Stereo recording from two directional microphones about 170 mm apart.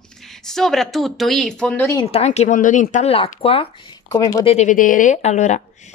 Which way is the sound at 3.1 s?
35° left (ahead or behind).